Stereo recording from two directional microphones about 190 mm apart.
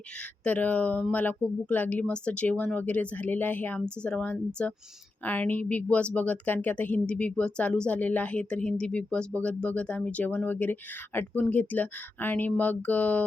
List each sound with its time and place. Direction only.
0.4 s speech: 10° left (ahead or behind)